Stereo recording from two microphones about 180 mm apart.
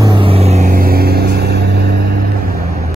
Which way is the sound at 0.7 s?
55° right (ahead or behind).